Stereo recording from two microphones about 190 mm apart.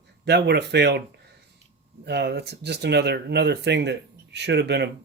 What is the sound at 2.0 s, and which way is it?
Speech, 60° right (ahead or behind).